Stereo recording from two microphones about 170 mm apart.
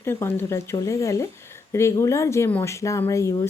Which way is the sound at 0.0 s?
15° left (ahead or behind).